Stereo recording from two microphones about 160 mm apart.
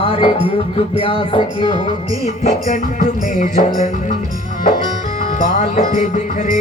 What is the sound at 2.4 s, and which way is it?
Music, 50° left (ahead or behind).